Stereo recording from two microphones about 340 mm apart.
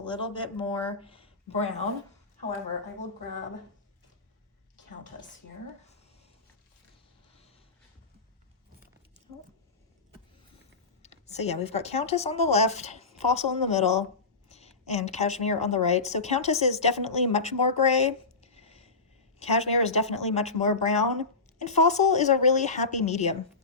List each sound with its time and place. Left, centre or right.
0.0 s speech: centre
11.0 s a woman's voice: centre